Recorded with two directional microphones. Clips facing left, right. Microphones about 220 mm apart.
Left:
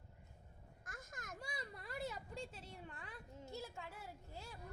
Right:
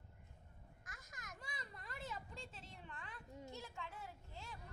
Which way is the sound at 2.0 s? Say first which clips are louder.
Left 5 dB; 40° left (ahead or behind).